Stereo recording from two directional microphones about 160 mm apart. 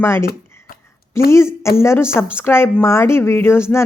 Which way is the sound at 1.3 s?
15° left (ahead or behind).